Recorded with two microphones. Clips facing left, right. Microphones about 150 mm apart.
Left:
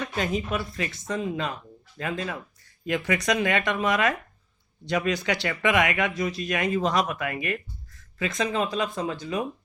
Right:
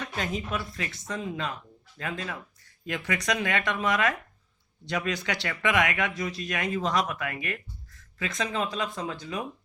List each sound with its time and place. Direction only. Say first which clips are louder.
0.2 s speech: left 4 dB; 10° left (ahead or behind)